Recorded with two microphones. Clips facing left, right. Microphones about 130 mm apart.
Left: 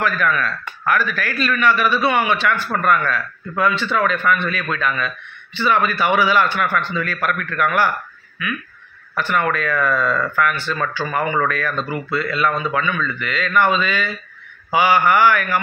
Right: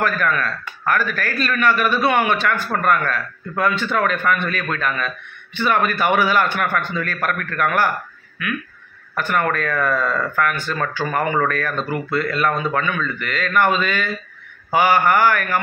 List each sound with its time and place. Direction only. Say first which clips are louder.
0.0 s speech: even; 40° right (ahead or behind)
9.1 s speech: even; 45° right (ahead or behind)